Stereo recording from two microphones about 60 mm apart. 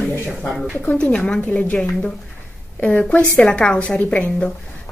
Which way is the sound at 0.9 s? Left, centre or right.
Centre.